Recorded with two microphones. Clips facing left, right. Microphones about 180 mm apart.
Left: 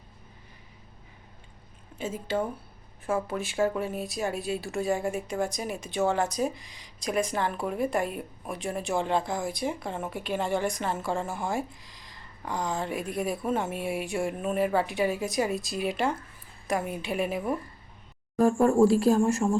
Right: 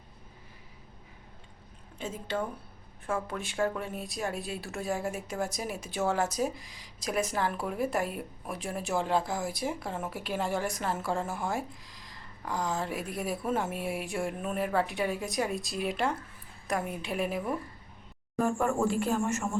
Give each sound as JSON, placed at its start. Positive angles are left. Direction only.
{"t": 2.0, "sound": "speech", "side_deg": 5}
{"t": 18.3, "sound": "speech", "side_deg": 35}